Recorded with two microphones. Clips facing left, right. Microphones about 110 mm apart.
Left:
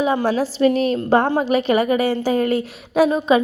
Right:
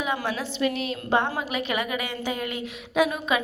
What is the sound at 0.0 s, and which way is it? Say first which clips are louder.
A woman's voice: left 10 dB; 35° left (ahead or behind).